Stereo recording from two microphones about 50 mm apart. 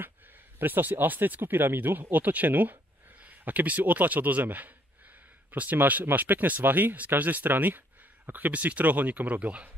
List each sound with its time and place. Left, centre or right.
0.6 s speech: right